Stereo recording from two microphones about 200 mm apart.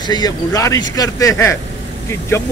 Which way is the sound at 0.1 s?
20° left (ahead or behind).